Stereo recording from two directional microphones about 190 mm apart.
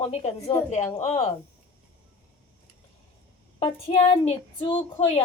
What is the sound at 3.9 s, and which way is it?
Speech, 30° left (ahead or behind).